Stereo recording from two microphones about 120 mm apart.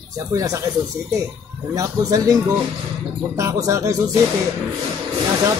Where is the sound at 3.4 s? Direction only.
25° right (ahead or behind).